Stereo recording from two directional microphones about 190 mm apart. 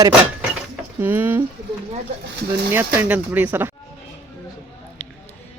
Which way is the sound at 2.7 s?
10° right (ahead or behind).